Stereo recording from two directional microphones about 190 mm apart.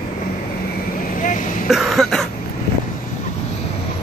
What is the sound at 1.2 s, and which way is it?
Throat clearing, 45° left (ahead or behind).